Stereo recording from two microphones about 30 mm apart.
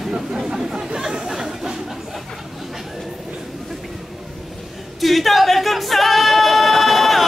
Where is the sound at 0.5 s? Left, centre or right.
Right.